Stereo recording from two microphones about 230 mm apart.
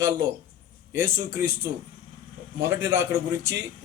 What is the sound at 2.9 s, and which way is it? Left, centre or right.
Speech, centre.